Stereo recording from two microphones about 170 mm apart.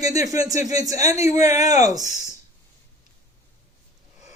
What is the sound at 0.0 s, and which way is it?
Speech, 20° right (ahead or behind).